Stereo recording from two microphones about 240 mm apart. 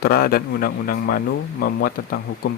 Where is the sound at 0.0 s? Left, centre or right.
Left.